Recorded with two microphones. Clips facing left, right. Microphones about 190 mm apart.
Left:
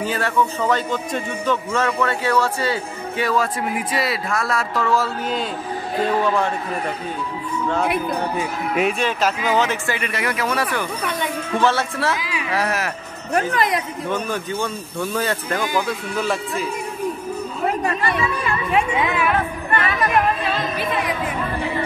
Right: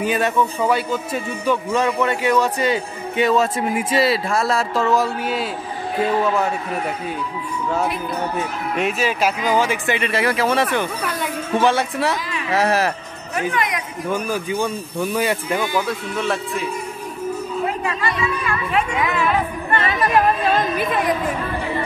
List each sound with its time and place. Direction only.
0.0 s a man's voice: 15° right (ahead or behind)
6.2 s a man's voice: 5° right (ahead or behind)
8.4 s a man's voice: centre (ahead or behind)
9.9 s speech: 30° right (ahead or behind)
11.0 s a man's voice: 5° right (ahead or behind)
12.2 s speech: 5° left (ahead or behind)
12.5 s speech: 30° right (ahead or behind)
13.3 s speech: 35° left (ahead or behind)
14.0 s a man's voice: 10° right (ahead or behind)
15.9 s speech: centre (ahead or behind)
18.7 s speech: 20° left (ahead or behind)
19.7 s a sound: 25° right (ahead or behind)
20.5 s a sound: 50° right (ahead or behind)